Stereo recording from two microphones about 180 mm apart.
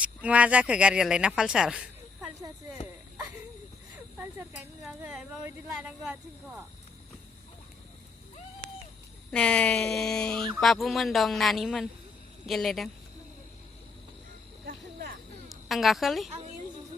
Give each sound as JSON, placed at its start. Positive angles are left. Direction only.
{"t": 0.0, "sound": "speech", "side_deg": -5}
{"t": 4.2, "sound": "speech", "side_deg": -15}
{"t": 4.8, "sound": "speech", "side_deg": 0}
{"t": 9.3, "sound": "speech", "side_deg": 5}
{"t": 15.4, "sound": "a woman's voice", "side_deg": 0}